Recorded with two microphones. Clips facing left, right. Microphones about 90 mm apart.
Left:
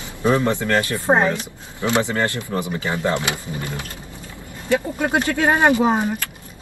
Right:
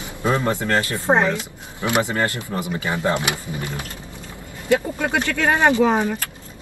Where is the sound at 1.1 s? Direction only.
30° left (ahead or behind).